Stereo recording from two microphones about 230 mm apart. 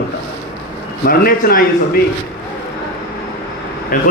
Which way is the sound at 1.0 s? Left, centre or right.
Left.